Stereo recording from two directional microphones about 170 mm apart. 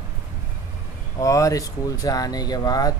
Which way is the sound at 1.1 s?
20° left (ahead or behind).